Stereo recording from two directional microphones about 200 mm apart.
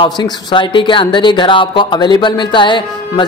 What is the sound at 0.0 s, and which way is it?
Speech, 25° left (ahead or behind).